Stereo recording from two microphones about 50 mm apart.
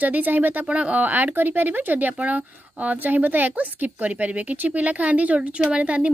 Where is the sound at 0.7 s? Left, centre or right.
Right.